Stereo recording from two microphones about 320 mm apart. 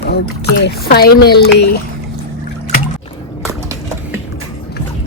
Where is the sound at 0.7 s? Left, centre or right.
Left.